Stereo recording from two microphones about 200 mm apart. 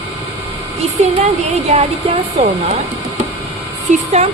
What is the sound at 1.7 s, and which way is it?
A woman's voice, 35° right (ahead or behind).